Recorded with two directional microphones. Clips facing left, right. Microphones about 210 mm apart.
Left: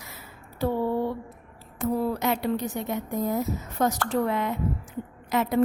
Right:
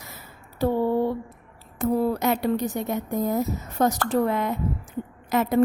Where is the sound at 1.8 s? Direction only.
40° right (ahead or behind).